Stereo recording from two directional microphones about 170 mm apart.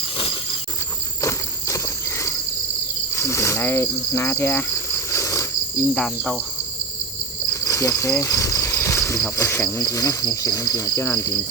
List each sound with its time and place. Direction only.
1.2 s insect: 20° left (ahead or behind)
3.2 s cricket: 15° left (ahead or behind)
5.9 s cricket: 5° left (ahead or behind)
7.5 s cricket: 20° left (ahead or behind)